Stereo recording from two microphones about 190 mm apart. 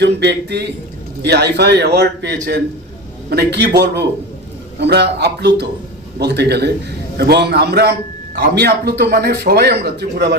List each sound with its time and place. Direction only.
0.0 s speech: 60° right (ahead or behind)